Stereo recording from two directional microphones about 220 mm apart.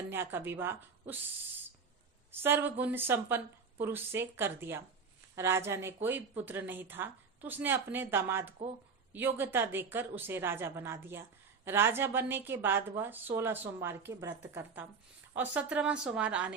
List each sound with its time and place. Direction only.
0.1 s speech: 10° right (ahead or behind)
2.3 s a woman's voice: 10° right (ahead or behind)